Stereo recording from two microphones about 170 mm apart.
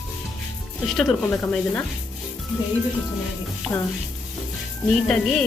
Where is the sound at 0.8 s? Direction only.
Centre (ahead or behind).